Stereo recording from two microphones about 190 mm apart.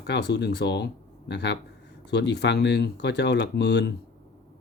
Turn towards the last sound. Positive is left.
turn(degrees=60)  # may be behind; listen again after turning